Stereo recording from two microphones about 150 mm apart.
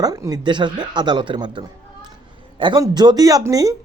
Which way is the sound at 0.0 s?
25° right (ahead or behind).